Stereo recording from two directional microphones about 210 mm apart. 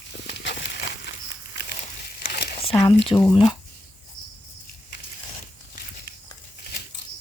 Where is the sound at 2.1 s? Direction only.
50° left (ahead or behind).